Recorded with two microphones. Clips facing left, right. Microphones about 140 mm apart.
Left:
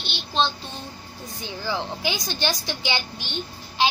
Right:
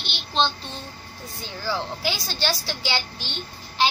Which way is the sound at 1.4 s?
15° left (ahead or behind).